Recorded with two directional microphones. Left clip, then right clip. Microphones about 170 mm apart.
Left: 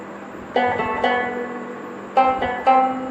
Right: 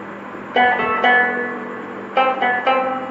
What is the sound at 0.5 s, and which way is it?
Music, 50° left (ahead or behind).